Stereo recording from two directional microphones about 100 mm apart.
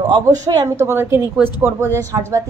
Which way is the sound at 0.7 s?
25° right (ahead or behind).